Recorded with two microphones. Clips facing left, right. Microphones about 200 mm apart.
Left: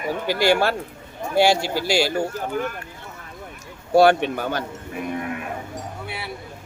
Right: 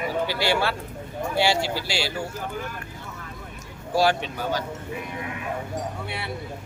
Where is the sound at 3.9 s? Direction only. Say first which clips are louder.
Left 7 dB; 60° left (ahead or behind).